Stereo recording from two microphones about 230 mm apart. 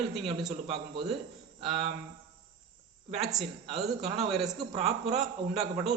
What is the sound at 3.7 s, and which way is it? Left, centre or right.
A man's voice, right.